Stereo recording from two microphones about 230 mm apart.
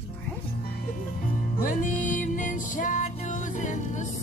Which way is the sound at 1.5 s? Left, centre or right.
Left.